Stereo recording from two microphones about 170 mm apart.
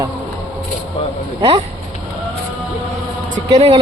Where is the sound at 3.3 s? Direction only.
40° right (ahead or behind).